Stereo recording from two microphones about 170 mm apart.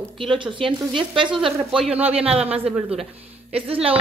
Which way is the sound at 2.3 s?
35° right (ahead or behind).